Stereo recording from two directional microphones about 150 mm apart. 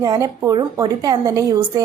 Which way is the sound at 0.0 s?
25° right (ahead or behind).